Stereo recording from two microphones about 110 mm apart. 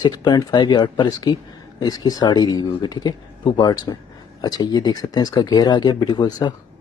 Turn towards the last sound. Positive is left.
turn(degrees=40)  # may be behind; listen again after turning